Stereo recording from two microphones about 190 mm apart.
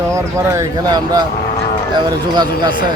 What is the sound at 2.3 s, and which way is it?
Speech, 20° right (ahead or behind).